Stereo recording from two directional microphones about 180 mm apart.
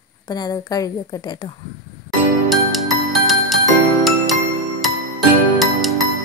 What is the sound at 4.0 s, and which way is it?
Music, centre (ahead or behind).